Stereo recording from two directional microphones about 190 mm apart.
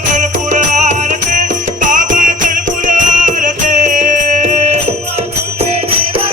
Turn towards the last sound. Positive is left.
turn(degrees=-40)  # may be behind; listen again after turning